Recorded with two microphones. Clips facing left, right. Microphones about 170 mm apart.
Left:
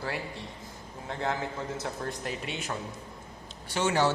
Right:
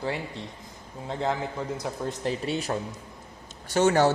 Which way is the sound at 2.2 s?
35° right (ahead or behind).